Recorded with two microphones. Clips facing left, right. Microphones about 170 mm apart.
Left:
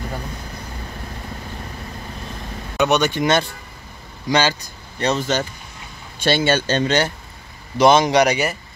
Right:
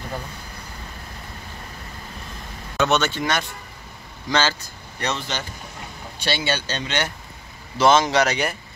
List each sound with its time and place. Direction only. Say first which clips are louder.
2.8 s a man's voice: left 3 dB; 15° left (ahead or behind)
4.3 s a man's voice: left 4 dB; 15° left (ahead or behind)
5.0 s speech: left 7 dB; 40° left (ahead or behind)
7.7 s a man's voice: left 3 dB; 15° left (ahead or behind)